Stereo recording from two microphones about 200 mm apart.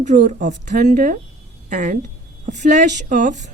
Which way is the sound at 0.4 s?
40° right (ahead or behind).